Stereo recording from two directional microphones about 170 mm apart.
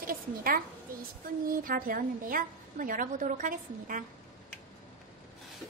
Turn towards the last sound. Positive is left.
turn(degrees=-50)  # may be behind; listen again after turning